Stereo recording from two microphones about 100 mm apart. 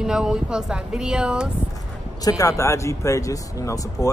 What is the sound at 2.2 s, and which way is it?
Speech, 35° left (ahead or behind).